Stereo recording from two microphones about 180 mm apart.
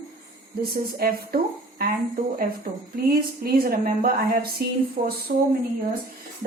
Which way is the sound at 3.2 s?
55° right (ahead or behind).